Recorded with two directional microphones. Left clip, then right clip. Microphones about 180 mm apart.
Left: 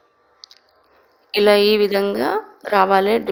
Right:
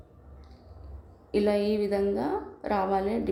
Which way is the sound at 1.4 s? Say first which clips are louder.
Left 14 dB; 50° left (ahead or behind).